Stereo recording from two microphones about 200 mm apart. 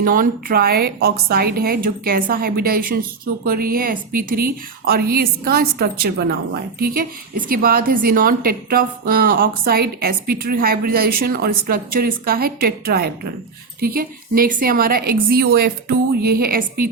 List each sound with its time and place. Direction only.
0.0 s a woman's voice: 45° right (ahead or behind)